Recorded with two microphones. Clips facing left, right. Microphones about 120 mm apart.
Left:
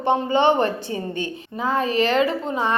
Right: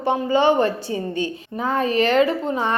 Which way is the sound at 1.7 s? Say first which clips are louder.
Right 2 dB; 35° left (ahead or behind).